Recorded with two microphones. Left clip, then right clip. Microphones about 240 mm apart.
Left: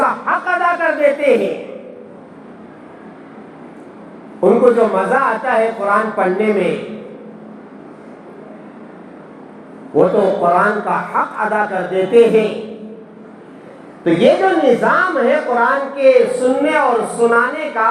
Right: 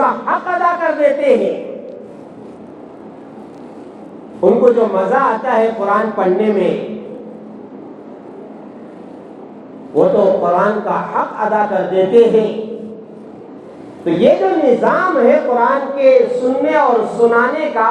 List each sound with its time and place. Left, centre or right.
0.0 s a sound: left
4.4 s speech: left
9.9 s speech: left
14.0 s a woman's voice: left